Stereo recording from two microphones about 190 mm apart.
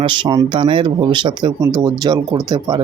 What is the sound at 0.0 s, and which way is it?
Speech, 25° right (ahead or behind).